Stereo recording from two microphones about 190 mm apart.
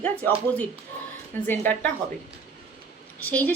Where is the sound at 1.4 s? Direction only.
10° left (ahead or behind).